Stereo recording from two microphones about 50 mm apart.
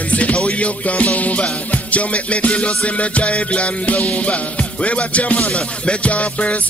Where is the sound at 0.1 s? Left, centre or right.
Left.